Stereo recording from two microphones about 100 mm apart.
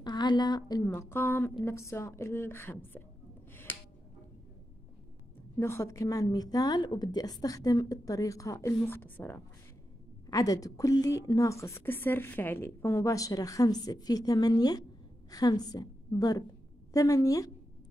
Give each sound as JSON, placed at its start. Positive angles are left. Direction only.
{"t": 0.0, "sound": "a woman's voice", "side_deg": 45}
{"t": 0.9, "sound": "a woman's voice", "side_deg": 25}
{"t": 5.6, "sound": "a woman's voice", "side_deg": 25}
{"t": 10.3, "sound": "a woman's voice", "side_deg": 35}